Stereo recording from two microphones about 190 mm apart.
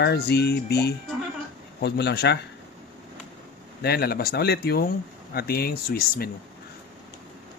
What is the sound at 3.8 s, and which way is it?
Speech, 55° left (ahead or behind).